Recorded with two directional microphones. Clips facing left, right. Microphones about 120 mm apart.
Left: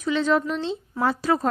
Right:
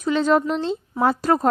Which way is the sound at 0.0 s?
40° right (ahead or behind).